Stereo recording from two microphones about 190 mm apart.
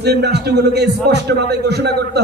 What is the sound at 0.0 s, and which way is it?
A man's voice, 60° right (ahead or behind).